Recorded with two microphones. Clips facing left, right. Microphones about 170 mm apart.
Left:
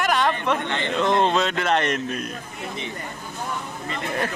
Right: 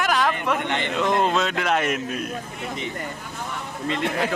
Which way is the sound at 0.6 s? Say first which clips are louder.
Even; 15° right (ahead or behind).